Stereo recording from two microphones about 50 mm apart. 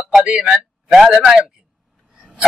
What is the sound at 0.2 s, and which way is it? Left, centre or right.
A man's voice, centre.